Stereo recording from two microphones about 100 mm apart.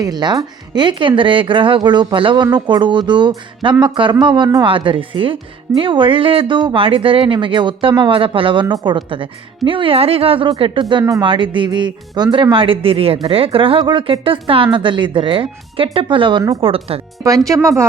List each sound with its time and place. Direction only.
0.0 s speech: 45° right (ahead or behind); by 10.5 s 65° right (ahead or behind)
10.6 s speech: 55° right (ahead or behind)
16.6 s speech: 70° right (ahead or behind)
17.5 s speech: 30° right (ahead or behind)